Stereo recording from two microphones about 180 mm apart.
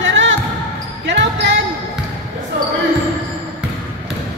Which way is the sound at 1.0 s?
75° right (ahead or behind).